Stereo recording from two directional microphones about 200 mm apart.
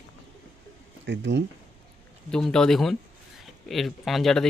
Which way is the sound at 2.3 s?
5° left (ahead or behind).